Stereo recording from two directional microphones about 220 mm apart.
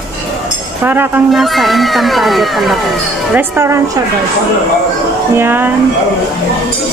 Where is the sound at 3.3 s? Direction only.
10° right (ahead or behind).